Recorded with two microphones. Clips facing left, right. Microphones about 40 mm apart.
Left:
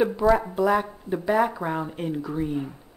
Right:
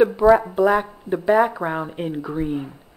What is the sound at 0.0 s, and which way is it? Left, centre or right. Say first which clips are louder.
Speech: right 6 dB; centre.